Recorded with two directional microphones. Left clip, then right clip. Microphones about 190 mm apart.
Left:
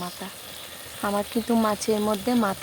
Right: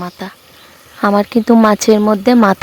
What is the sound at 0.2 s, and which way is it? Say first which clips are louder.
Speech: right 7 dB; 35° right (ahead or behind).